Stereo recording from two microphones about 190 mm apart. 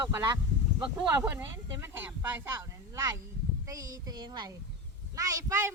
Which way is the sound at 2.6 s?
15° right (ahead or behind).